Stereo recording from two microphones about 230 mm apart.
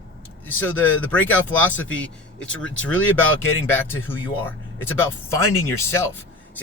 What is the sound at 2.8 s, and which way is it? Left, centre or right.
Speech, left.